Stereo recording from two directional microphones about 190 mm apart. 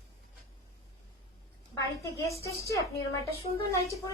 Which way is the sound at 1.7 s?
15° left (ahead or behind).